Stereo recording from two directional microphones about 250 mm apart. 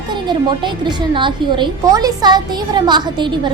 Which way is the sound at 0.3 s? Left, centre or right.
Centre.